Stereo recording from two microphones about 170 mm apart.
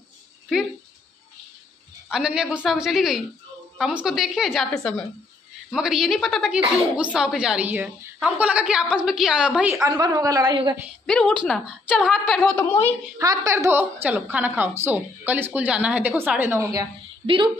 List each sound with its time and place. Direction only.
2.0 s a woman's voice: 5° right (ahead or behind)
9.8 s a woman's voice: 20° right (ahead or behind)
11.1 s a woman's voice: 5° left (ahead or behind)
12.4 s a woman's voice: 10° left (ahead or behind)
13.2 s speech: 20° right (ahead or behind)